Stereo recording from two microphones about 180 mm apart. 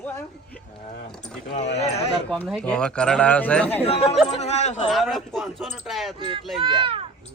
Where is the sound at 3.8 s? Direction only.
35° left (ahead or behind).